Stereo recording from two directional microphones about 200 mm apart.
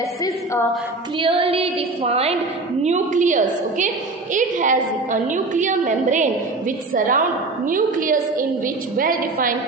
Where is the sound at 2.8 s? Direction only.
35° right (ahead or behind).